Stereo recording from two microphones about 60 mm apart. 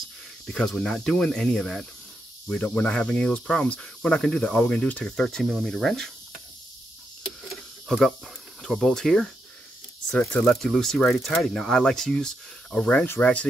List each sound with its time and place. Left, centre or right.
0.5 s speech: centre
2.6 s speech: centre
5.1 s speech: centre
7.9 s speech: centre
10.4 s speech: centre; by 13.5 s left